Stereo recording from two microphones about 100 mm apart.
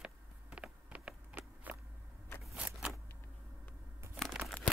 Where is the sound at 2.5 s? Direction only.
10° right (ahead or behind).